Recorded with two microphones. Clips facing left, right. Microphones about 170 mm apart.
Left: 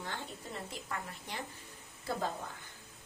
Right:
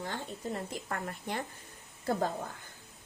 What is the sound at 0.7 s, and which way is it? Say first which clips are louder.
A woman's voice: right 5 dB; 55° right (ahead or behind).